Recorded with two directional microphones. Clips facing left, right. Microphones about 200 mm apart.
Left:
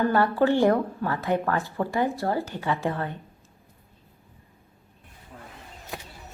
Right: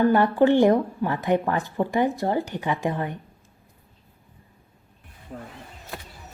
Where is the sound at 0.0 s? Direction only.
15° right (ahead or behind).